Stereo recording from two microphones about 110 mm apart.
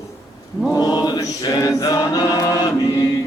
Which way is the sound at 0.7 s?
35° left (ahead or behind).